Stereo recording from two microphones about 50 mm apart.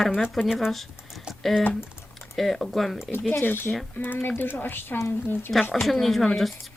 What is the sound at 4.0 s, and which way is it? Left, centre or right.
A woman's voice, left.